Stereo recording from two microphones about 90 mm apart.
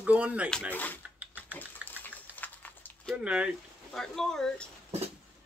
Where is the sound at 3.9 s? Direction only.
5° left (ahead or behind).